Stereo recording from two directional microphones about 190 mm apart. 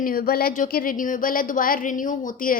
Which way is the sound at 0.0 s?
50° left (ahead or behind).